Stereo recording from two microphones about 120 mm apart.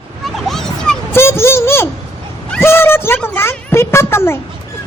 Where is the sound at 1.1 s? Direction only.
20° left (ahead or behind).